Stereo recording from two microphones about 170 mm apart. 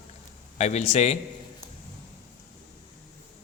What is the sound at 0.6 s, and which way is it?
Speech, 40° left (ahead or behind).